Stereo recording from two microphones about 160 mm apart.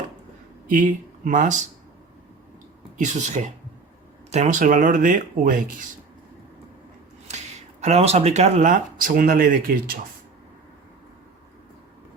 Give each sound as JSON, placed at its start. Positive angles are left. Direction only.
{"t": 0.7, "sound": "speech", "side_deg": -55}
{"t": 3.0, "sound": "speech", "side_deg": -50}
{"t": 7.8, "sound": "speech", "side_deg": -45}